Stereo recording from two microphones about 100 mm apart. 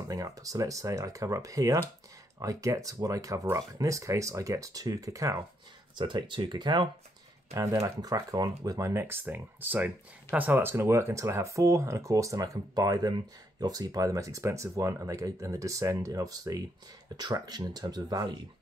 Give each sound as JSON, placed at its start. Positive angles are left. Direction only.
{"t": 0.1, "sound": "speech", "side_deg": -35}
{"t": 5.9, "sound": "speech", "side_deg": -50}
{"t": 7.5, "sound": "speech", "side_deg": -35}
{"t": 8.9, "sound": "speech", "side_deg": -20}